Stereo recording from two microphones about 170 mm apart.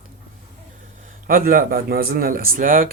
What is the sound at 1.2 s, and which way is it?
Speech, 60° right (ahead or behind).